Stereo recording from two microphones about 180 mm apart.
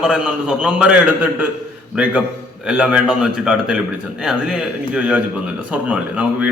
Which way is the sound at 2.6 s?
5° right (ahead or behind).